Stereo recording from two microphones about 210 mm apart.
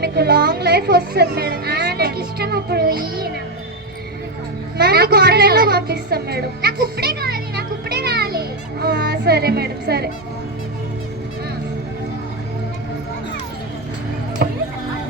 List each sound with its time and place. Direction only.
0.0 s a woman's voice: 50° right (ahead or behind)
4.8 s speech: 45° right (ahead or behind)
14.4 s music: 45° right (ahead or behind)